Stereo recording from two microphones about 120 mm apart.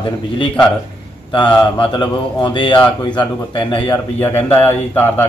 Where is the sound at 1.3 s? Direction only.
45° left (ahead or behind).